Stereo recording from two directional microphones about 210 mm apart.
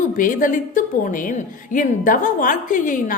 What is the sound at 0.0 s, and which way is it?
A woman's voice, 40° left (ahead or behind).